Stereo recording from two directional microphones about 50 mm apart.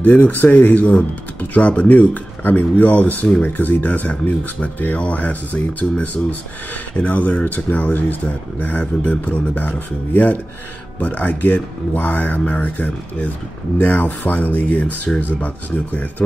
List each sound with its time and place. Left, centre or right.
0.0 s speech: left
15.4 s speech: left